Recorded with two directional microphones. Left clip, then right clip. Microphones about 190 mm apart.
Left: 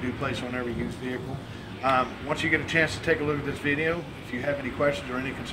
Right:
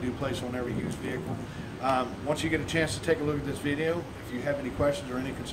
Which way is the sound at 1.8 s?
Centre (ahead or behind).